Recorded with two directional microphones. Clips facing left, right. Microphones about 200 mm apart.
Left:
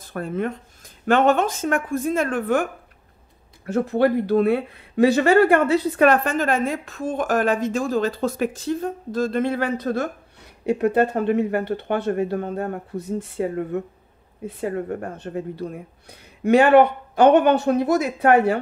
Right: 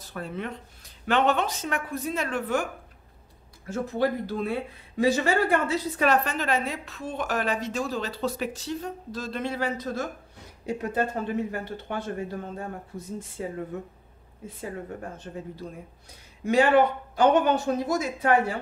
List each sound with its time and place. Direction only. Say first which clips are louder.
0.0 s speech: left 8 dB; 50° left (ahead or behind)
3.6 s speech: left 7 dB; 65° left (ahead or behind)